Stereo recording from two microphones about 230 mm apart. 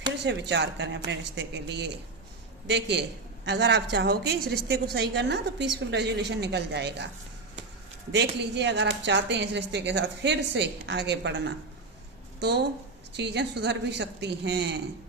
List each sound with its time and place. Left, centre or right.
0.3 s a woman's voice: right
8.1 s a woman's voice: right